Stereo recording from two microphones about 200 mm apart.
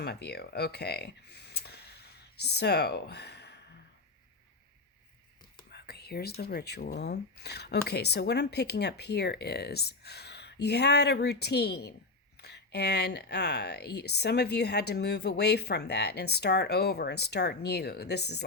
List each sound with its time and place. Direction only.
0.0 s speech: 55° left (ahead or behind)
5.7 s speech: 55° left (ahead or behind)